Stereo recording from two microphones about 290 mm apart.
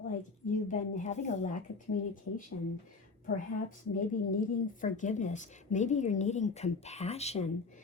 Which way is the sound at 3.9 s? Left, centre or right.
Left.